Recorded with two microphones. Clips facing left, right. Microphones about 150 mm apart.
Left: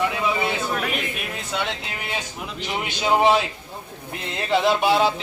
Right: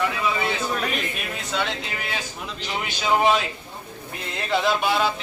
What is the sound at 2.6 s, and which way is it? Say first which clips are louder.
Speech: left 1 dB; 20° left (ahead or behind).